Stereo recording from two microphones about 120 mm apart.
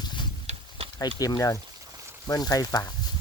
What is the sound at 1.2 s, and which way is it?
Speech, 30° left (ahead or behind).